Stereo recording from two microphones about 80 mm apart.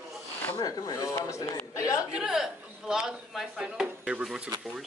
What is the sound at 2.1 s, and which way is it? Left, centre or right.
Speech, centre.